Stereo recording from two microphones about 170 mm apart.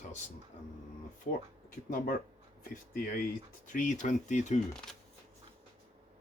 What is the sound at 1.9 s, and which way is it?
Speech, 55° left (ahead or behind).